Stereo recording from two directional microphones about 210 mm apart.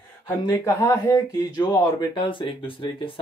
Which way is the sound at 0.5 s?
15° left (ahead or behind).